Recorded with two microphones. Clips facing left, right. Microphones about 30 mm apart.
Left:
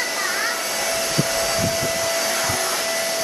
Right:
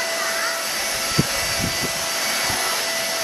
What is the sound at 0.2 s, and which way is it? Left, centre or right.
Vacuum cleaner, centre.